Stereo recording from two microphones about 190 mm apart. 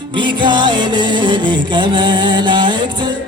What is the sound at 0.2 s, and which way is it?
Music, 25° right (ahead or behind).